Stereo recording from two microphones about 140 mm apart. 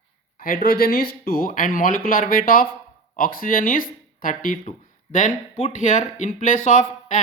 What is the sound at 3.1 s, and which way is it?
Speech, 90° left.